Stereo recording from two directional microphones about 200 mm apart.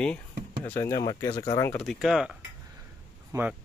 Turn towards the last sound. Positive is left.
turn(degrees=-20)  # may be behind; listen again after turning